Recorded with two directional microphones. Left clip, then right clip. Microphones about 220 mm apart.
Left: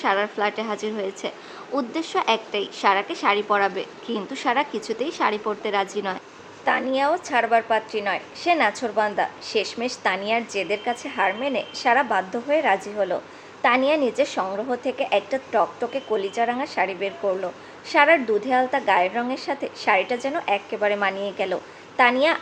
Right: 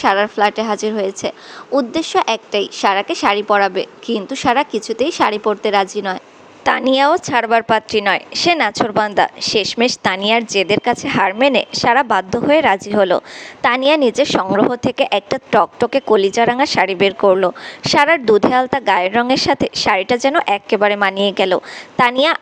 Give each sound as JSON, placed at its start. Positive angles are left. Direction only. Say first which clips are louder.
{"t": 0.0, "sound": "a woman's voice", "louder": "right 8 dB", "side_deg": -25}
{"t": 6.7, "sound": "a woman's voice", "louder": "right 8 dB", "side_deg": -45}